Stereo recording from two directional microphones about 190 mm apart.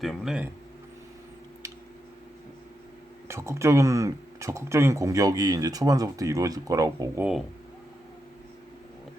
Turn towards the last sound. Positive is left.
turn(degrees=-15)  # may be behind; listen again after turning